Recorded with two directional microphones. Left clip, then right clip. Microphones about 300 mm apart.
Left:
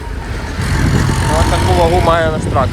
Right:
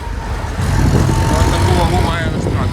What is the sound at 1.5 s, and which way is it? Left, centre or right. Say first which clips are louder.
Speech: left 4 dB; right.